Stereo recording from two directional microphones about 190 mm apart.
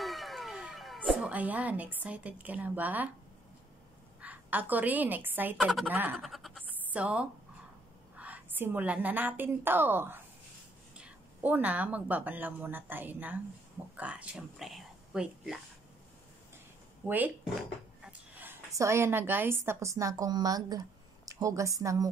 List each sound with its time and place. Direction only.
0.0 s music: centre (ahead or behind)
4.2 s a woman's voice: 10° right (ahead or behind)
6.7 s a sound: 5° right (ahead or behind)
8.2 s a woman's voice: 10° right (ahead or behind)
17.0 s a woman's voice: 10° right (ahead or behind)